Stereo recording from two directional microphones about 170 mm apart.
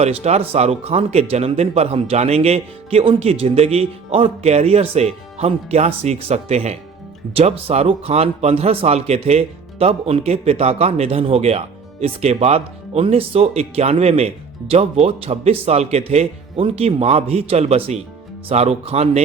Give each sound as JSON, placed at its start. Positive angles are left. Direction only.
{"t": 0.0, "sound": "a man's voice", "side_deg": -40}